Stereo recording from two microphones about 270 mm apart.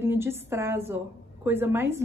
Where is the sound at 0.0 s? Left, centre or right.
Centre.